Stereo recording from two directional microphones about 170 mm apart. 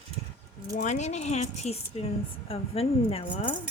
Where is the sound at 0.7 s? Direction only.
45° left (ahead or behind).